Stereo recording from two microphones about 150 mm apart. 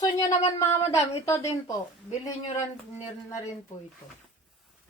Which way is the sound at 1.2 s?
20° left (ahead or behind).